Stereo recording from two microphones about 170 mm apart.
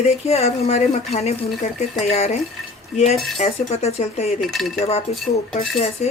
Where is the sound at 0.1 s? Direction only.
40° left (ahead or behind).